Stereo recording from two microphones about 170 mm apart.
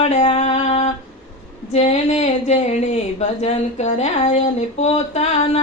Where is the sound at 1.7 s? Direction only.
40° left (ahead or behind).